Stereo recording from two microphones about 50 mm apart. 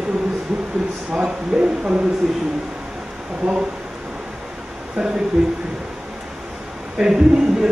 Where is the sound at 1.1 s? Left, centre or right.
Centre.